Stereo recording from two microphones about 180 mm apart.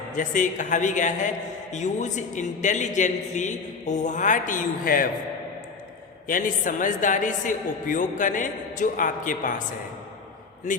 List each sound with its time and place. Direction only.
0.1 s a woman's voice: 45° left (ahead or behind)
6.2 s a woman's voice: 50° left (ahead or behind)